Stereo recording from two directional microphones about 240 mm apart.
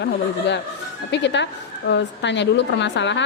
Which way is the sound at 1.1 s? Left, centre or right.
Left.